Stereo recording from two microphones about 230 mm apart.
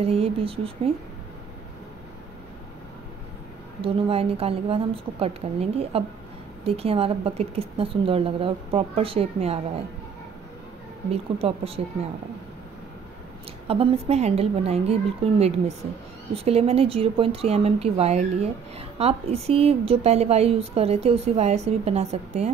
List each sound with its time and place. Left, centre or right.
0.0 s speech: right
3.8 s speech: right
11.1 s speech: right
13.7 s speech: right